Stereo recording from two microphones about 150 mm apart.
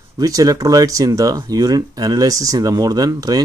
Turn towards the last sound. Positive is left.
turn(degrees=-25)  # may be behind; listen again after turning